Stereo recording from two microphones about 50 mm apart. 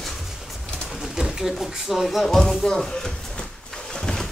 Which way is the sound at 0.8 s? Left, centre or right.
Centre.